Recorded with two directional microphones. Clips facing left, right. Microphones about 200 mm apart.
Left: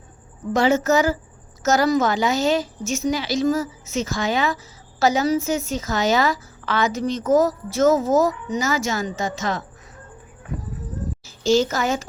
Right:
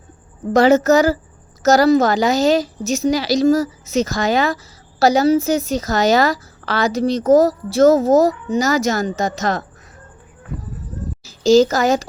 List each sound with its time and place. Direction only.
0.5 s speech: 40° right (ahead or behind)
11.4 s speech: 40° right (ahead or behind)